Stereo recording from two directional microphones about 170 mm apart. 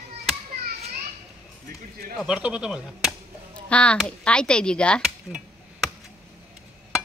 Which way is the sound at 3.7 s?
5° left (ahead or behind).